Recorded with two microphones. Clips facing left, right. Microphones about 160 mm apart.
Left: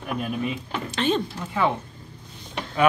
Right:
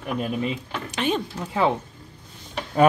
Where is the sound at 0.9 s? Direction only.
10° right (ahead or behind).